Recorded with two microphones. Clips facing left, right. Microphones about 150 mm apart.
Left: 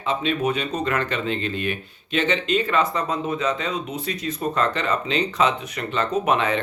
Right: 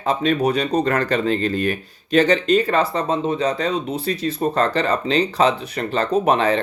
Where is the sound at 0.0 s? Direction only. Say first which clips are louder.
Right 4 dB; 40° right (ahead or behind).